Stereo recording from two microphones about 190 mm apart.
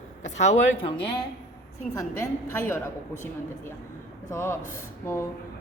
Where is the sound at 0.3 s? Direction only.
40° left (ahead or behind).